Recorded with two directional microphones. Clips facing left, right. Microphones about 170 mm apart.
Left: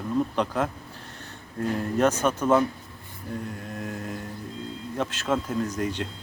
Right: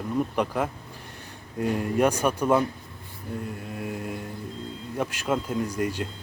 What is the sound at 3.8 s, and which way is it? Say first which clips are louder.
Speech: right 2 dB; 10° right (ahead or behind).